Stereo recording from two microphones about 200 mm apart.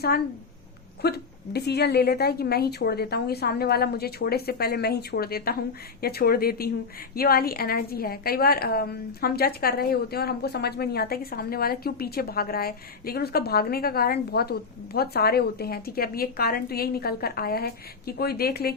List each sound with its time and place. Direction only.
1.0 s a woman's voice: 55° left (ahead or behind)